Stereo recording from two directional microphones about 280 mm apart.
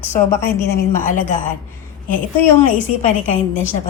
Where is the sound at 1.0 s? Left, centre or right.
Left.